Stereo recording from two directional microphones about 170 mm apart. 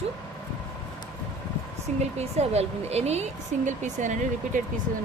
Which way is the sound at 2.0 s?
40° right (ahead or behind).